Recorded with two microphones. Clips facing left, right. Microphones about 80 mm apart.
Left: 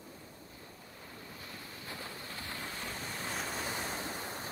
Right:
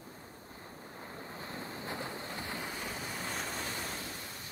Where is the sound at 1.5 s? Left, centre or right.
Right; by 4.0 s centre.